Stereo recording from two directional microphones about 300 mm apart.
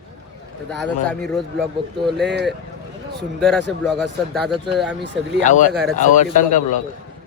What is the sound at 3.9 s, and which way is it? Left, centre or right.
Speech, centre.